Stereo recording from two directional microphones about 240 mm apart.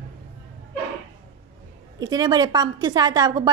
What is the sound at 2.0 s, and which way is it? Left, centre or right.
A woman's voice, centre.